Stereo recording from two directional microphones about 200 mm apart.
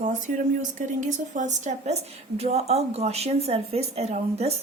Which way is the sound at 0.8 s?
40° right (ahead or behind).